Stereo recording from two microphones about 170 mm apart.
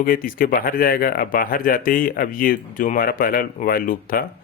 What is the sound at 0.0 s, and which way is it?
Speech, 55° left (ahead or behind).